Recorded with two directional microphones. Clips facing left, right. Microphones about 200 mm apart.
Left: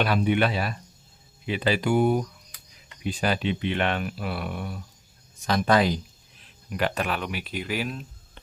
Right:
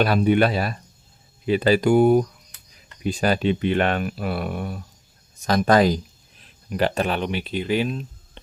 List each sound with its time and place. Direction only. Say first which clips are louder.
0.0 s speech: right 5 dB; 40° right (ahead or behind)
6.7 s speech: right 5 dB; 30° right (ahead or behind)